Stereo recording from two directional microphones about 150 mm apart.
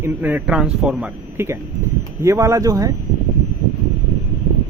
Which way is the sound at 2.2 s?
20° right (ahead or behind).